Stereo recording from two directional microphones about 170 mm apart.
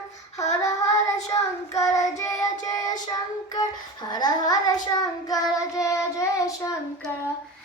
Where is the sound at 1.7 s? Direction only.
20° left (ahead or behind).